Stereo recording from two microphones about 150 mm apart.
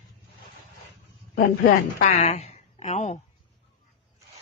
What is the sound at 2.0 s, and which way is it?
Speech, 50° left (ahead or behind).